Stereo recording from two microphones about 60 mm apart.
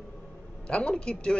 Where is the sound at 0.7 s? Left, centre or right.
Centre.